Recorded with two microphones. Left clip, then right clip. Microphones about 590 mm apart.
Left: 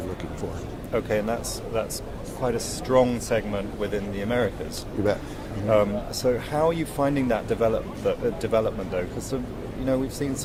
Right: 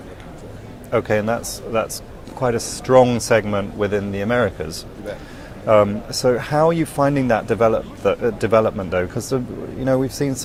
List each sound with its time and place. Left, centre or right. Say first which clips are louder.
0.9 s speech: right 6 dB; right
5.6 s speech: right 7 dB; right